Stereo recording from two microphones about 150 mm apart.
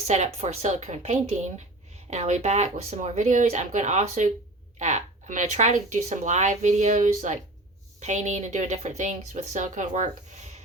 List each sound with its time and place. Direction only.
0.3 s speech: 50° right (ahead or behind)